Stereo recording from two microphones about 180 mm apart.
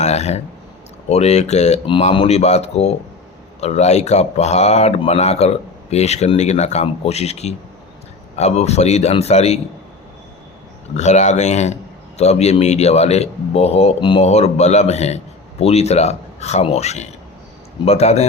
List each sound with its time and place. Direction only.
0.0 s a sound: 40° left (ahead or behind)
1.1 s a man's voice: 35° left (ahead or behind)
10.9 s a man's voice: 40° left (ahead or behind)